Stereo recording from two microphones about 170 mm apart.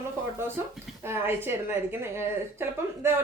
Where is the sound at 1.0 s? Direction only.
15° right (ahead or behind).